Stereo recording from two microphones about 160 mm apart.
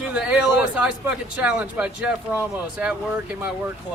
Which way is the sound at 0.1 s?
5° right (ahead or behind).